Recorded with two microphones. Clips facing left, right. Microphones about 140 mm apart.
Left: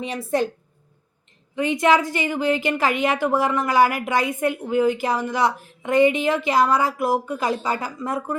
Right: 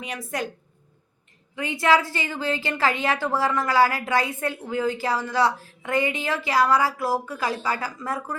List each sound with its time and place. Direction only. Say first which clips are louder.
0.3 s a woman's voice: left 8 dB; 30° left (ahead or behind)
1.5 s a woman's voice: left 3 dB; 20° left (ahead or behind)